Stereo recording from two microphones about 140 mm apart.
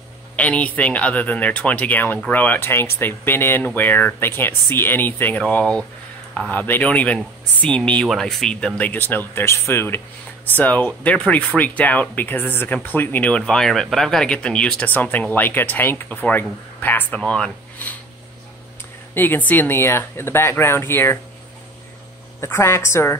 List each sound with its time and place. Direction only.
0.4 s speech: 10° left (ahead or behind)
19.1 s speech: 15° left (ahead or behind)
22.4 s a woman's voice: 20° left (ahead or behind)